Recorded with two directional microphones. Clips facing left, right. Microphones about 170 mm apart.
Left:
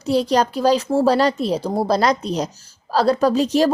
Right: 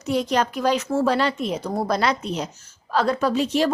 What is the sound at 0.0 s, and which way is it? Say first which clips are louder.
A woman's voice: left 4 dB; 35° left (ahead or behind).